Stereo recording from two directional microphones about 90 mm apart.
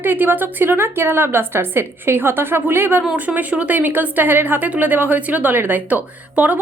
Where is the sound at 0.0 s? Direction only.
20° right (ahead or behind).